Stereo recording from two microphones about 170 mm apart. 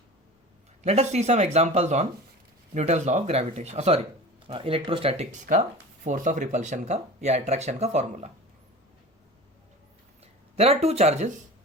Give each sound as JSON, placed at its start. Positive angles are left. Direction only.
{"t": 0.8, "sound": "speech", "side_deg": -40}
{"t": 10.5, "sound": "speech", "side_deg": -35}